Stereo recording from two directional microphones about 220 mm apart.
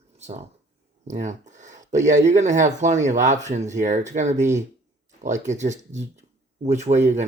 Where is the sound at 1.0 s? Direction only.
35° right (ahead or behind).